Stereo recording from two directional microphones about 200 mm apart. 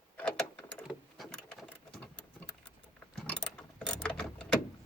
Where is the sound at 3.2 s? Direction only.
5° left (ahead or behind).